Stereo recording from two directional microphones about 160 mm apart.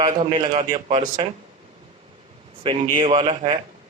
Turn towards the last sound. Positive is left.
turn(degrees=-35)  # may be behind; listen again after turning